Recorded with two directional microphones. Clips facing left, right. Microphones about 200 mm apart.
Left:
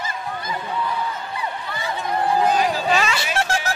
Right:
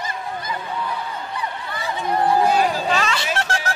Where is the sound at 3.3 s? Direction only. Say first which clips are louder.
Left 2 dB; 10° left (ahead or behind).